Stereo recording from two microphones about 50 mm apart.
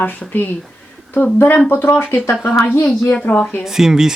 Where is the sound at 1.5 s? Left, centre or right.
Left.